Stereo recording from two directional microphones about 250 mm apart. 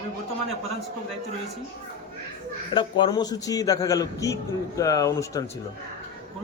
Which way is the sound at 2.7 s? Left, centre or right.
Centre.